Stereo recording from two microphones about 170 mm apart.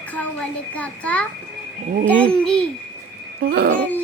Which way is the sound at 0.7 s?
10° left (ahead or behind).